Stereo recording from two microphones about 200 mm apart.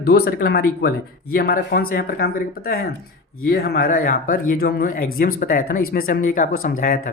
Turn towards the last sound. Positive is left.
turn(degrees=45)  # may be behind; listen again after turning